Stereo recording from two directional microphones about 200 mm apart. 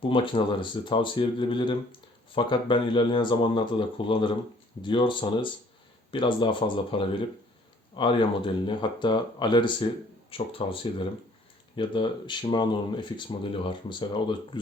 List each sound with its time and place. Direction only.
0.1 s speech: 25° left (ahead or behind)
11.8 s speech: 25° left (ahead or behind)